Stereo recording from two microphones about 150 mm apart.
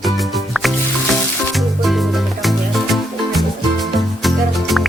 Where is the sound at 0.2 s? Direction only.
Centre (ahead or behind).